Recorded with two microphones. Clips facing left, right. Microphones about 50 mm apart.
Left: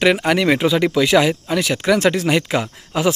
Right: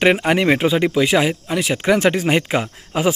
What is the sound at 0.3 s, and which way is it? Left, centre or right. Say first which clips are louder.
Speech: even; right.